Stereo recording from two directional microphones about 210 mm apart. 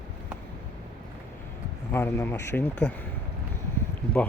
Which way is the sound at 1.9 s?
10° left (ahead or behind).